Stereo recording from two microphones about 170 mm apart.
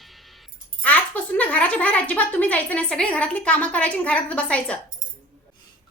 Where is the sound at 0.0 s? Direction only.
Centre (ahead or behind).